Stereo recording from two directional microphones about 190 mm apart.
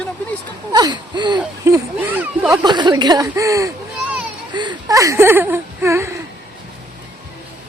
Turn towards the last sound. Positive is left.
turn(degrees=-15)  # may be behind; listen again after turning